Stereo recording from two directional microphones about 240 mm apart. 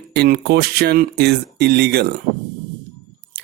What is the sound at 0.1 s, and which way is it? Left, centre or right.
Speech, right.